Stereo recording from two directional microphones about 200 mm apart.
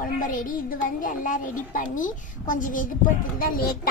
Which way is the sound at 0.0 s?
45° left (ahead or behind).